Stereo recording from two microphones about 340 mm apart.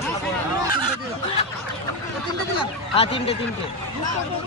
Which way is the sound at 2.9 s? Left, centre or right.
Centre.